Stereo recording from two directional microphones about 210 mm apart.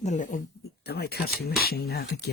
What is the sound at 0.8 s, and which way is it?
Speech, 50° left (ahead or behind).